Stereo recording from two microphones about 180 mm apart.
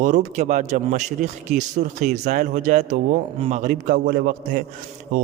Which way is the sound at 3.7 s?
50° right (ahead or behind).